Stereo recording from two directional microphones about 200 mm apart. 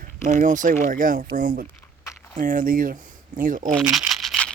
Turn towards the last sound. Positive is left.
turn(degrees=0)  # may be behind; listen again after turning